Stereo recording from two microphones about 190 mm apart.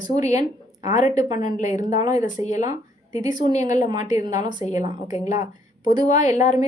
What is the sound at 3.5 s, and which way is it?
Speech, 40° left (ahead or behind).